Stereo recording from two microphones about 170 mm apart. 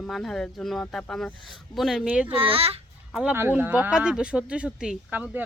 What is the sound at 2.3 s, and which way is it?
Speech, 35° right (ahead or behind).